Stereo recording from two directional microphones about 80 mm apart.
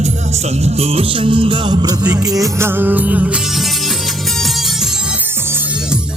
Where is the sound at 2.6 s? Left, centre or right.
Right.